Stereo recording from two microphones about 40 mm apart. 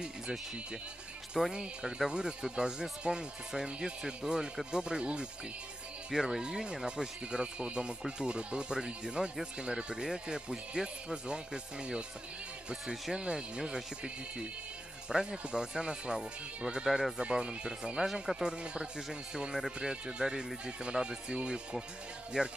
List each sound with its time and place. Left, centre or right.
1.5 s speech: right
13.1 s speech: centre
15.0 s speech: centre
18.0 s speech: centre
18.6 s speech: right